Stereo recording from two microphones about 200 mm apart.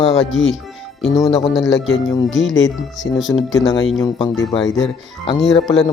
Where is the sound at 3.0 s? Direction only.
15° left (ahead or behind).